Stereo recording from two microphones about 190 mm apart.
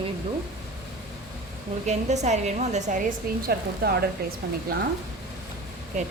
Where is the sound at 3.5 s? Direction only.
55° right (ahead or behind).